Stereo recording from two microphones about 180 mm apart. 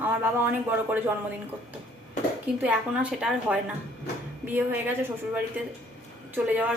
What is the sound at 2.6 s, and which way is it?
Speech, 5° right (ahead or behind).